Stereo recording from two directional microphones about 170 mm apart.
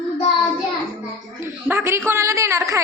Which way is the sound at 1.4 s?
15° right (ahead or behind).